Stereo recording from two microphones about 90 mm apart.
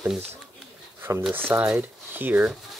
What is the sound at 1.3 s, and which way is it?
Speech, 25° right (ahead or behind).